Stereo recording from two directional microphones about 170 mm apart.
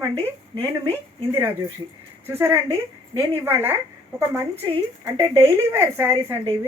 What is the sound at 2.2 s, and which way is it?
A woman's voice, 15° right (ahead or behind).